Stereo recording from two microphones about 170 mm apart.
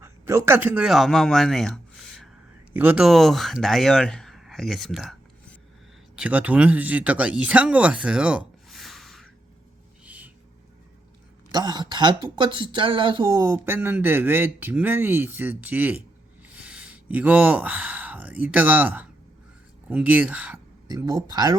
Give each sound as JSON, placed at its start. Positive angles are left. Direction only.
{"t": 0.0, "sound": "speech", "side_deg": -15}
{"t": 2.7, "sound": "speech", "side_deg": -10}
{"t": 10.1, "sound": "vehicle", "side_deg": -10}
{"t": 11.5, "sound": "speech", "side_deg": -25}
{"t": 13.4, "sound": "speech", "side_deg": -15}
{"t": 20.8, "sound": "speech", "side_deg": -20}